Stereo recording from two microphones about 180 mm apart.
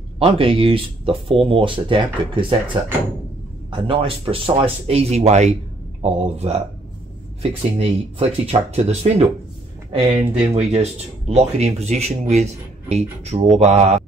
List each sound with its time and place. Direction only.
0.2 s speech: 30° right (ahead or behind)
3.8 s speech: 30° right (ahead or behind)
10.5 s speech: 35° right (ahead or behind)